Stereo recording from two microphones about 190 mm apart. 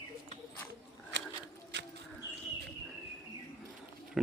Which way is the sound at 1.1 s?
70° right (ahead or behind).